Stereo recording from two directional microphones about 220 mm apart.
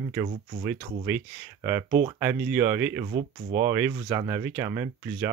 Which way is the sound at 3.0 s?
40° right (ahead or behind).